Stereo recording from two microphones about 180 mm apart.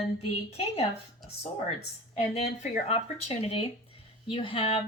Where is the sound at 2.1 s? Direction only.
40° left (ahead or behind).